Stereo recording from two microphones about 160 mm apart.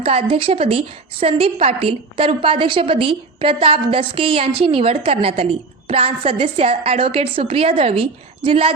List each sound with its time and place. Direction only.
0.0 s a woman's voice: 35° right (ahead or behind)